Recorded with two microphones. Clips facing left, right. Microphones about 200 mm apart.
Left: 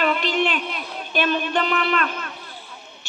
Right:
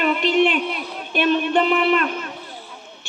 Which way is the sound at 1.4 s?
10° right (ahead or behind).